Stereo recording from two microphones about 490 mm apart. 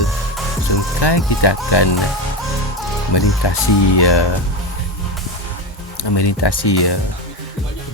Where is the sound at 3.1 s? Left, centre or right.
Left.